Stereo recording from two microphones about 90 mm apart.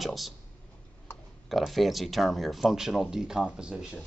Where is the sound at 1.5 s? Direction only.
Centre (ahead or behind).